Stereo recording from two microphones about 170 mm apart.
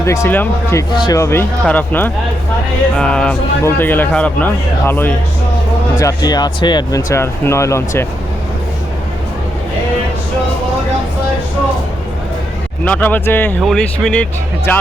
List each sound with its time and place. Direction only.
0.0 s a man's voice: 15° left (ahead or behind)
12.8 s a man's voice: 10° left (ahead or behind)